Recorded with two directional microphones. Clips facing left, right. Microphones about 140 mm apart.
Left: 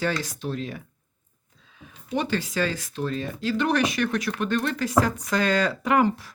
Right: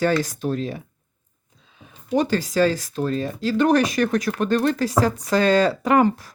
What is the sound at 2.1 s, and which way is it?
Speech, 40° right (ahead or behind).